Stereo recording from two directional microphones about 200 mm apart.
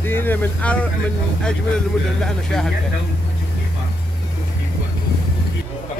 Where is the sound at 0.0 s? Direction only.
10° left (ahead or behind).